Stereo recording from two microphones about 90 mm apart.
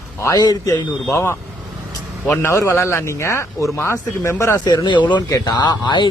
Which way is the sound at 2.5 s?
30° left (ahead or behind).